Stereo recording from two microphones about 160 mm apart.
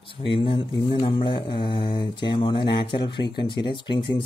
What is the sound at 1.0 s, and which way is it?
Speech, 30° left (ahead or behind).